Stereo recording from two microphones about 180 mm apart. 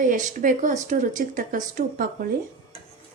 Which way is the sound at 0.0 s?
45° right (ahead or behind).